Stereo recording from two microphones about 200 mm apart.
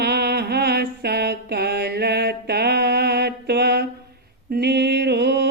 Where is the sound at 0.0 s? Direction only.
55° right (ahead or behind).